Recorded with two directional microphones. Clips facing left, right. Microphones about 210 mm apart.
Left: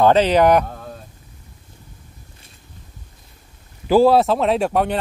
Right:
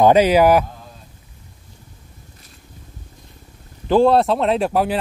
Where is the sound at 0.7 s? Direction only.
60° left (ahead or behind).